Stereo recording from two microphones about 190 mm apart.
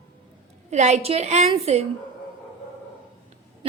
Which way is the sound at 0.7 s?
35° right (ahead or behind).